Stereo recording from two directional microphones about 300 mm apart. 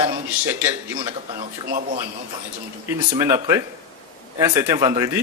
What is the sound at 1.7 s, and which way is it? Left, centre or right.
Speech, right.